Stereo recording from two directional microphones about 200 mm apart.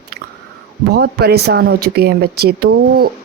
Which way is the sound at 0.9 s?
55° right (ahead or behind).